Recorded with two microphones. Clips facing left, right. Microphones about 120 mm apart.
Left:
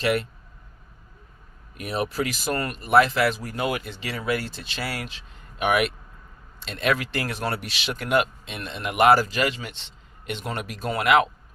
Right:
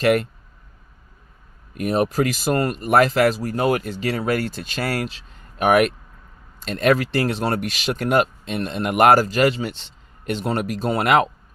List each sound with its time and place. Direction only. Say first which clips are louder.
0.0 s speech: right 6 dB; 45° right (ahead or behind)
1.7 s speech: right 7 dB; 45° right (ahead or behind)
7.5 s speech: right 7 dB; 45° right (ahead or behind)